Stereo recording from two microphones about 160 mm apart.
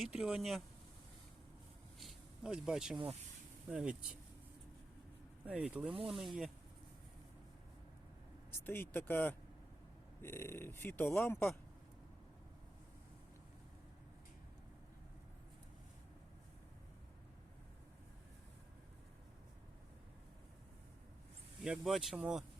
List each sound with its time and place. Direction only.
0.0 s speech: 5° right (ahead or behind)
2.0 s a sound: centre (ahead or behind)
3.7 s speech: 5° right (ahead or behind)
5.5 s speech: 10° right (ahead or behind)
8.4 s speech: 15° left (ahead or behind)
21.6 s speech: 5° right (ahead or behind)